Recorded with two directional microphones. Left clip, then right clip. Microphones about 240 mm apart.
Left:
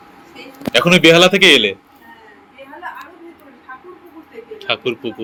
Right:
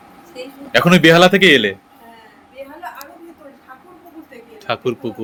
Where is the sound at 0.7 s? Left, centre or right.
Right.